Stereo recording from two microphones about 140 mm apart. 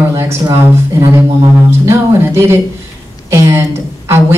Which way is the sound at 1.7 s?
20° right (ahead or behind).